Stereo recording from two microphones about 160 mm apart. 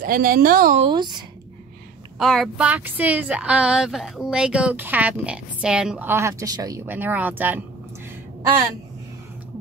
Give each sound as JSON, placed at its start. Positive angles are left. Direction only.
{"t": 0.0, "sound": "a woman's voice", "side_deg": -65}
{"t": 0.7, "sound": "speech", "side_deg": -30}
{"t": 2.1, "sound": "speech", "side_deg": 0}
{"t": 6.9, "sound": "speech", "side_deg": -10}